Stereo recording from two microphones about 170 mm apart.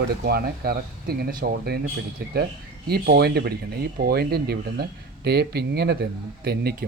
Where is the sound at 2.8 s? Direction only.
65° right (ahead or behind).